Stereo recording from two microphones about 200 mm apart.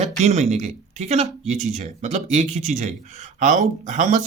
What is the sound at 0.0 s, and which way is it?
Speech, 35° right (ahead or behind).